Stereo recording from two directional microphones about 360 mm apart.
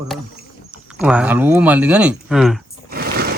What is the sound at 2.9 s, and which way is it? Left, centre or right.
Roar, right.